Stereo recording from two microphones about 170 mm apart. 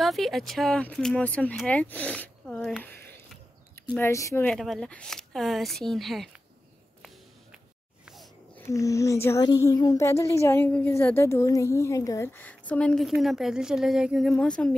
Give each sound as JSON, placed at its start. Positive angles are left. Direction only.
{"t": 0.0, "sound": "speech", "side_deg": 0}
{"t": 4.5, "sound": "speech", "side_deg": 5}
{"t": 8.5, "sound": "speech", "side_deg": 15}